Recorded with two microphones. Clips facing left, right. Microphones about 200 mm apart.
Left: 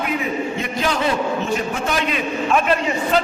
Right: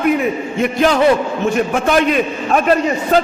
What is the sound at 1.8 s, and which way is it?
Speech, 55° right (ahead or behind).